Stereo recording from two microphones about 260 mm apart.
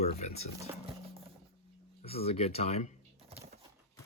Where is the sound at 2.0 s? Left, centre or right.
Left.